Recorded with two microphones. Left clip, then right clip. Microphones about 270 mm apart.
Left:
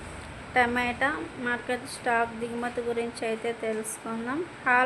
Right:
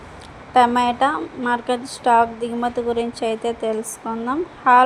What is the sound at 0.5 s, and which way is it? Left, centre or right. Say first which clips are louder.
A woman's voice: right 9 dB; centre.